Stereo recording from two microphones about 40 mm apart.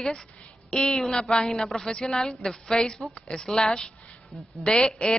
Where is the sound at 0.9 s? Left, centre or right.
Centre.